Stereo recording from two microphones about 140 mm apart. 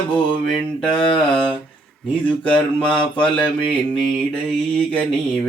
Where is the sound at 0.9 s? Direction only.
35° left (ahead or behind).